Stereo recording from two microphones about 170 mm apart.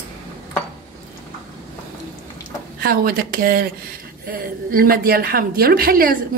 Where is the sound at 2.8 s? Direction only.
60° right (ahead or behind).